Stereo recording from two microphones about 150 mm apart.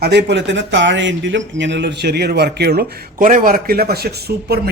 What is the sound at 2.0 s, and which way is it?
A man's voice, 90° right.